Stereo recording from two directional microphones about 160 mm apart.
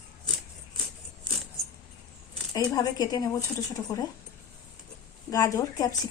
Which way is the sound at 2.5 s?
25° left (ahead or behind).